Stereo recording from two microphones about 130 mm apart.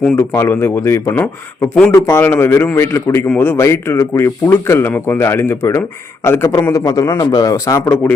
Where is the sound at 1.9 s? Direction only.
20° left (ahead or behind).